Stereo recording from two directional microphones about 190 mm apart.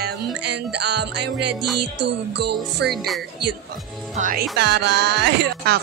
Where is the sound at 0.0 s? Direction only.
60° right (ahead or behind).